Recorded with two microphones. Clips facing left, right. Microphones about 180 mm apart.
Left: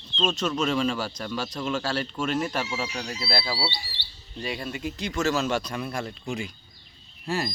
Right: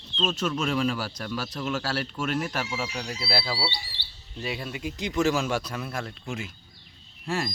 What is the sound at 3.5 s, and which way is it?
Speech, 5° left (ahead or behind).